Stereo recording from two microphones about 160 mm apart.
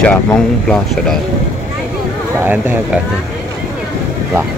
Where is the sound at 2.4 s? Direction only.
10° right (ahead or behind).